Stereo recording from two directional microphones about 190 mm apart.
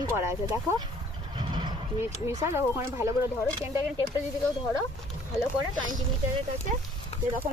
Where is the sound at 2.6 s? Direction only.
10° right (ahead or behind).